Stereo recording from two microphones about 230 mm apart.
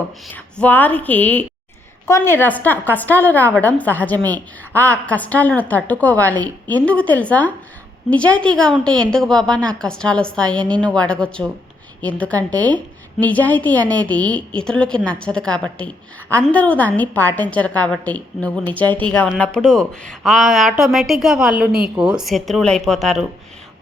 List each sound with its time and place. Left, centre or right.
0.3 s a woman's voice: centre